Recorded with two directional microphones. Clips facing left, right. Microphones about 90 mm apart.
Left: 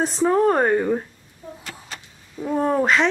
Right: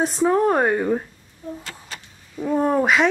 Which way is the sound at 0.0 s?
Centre (ahead or behind).